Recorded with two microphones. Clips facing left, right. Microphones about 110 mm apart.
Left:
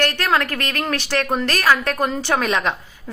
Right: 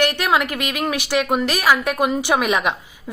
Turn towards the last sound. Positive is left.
turn(degrees=-10)  # may be behind; listen again after turning